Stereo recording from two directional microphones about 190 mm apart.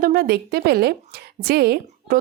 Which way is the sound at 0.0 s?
55° right (ahead or behind).